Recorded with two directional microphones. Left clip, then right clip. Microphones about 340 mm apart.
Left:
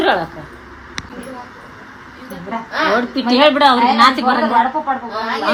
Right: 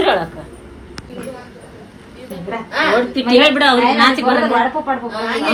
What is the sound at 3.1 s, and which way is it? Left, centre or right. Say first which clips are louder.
Speech: even; left.